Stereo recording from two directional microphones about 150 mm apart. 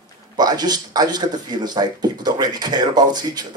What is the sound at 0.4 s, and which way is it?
Speech, 25° right (ahead or behind).